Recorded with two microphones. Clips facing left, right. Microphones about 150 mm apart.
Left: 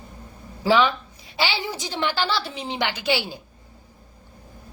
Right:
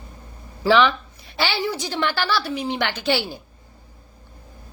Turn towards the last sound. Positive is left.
turn(degrees=15)  # may be behind; listen again after turning